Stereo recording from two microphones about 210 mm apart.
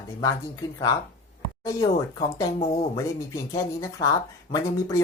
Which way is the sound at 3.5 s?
15° left (ahead or behind).